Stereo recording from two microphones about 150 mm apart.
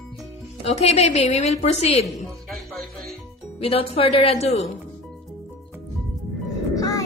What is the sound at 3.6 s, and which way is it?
Speech, 40° left (ahead or behind).